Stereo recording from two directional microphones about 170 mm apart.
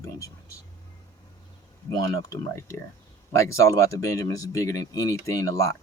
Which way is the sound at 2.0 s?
20° left (ahead or behind).